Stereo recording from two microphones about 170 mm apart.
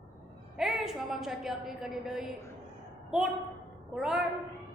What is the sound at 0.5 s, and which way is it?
A woman's voice, centre (ahead or behind).